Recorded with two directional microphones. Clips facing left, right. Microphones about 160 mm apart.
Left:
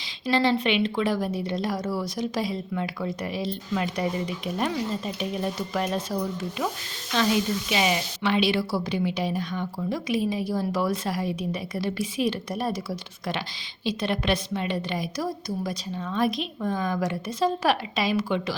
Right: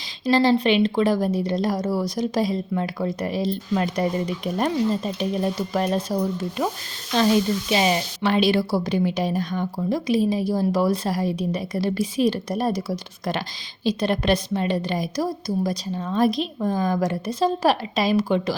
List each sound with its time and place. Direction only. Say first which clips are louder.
0.3 s a woman's voice: right 5 dB; 40° right (ahead or behind)